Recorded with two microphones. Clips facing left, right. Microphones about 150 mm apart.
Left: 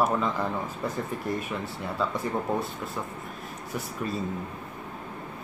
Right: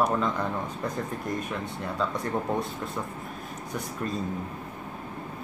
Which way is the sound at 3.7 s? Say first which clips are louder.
Even; 5° left (ahead or behind).